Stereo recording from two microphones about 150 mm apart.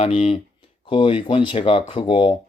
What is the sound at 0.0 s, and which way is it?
Speech, 40° left (ahead or behind).